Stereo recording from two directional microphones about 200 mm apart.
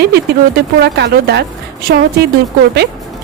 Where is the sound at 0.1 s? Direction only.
55° right (ahead or behind).